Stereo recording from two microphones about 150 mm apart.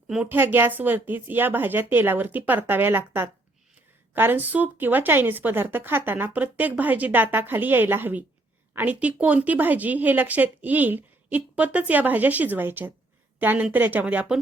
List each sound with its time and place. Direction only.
0.1 s a woman's voice: 10° right (ahead or behind)